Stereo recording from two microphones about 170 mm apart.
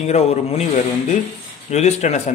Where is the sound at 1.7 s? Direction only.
40° left (ahead or behind).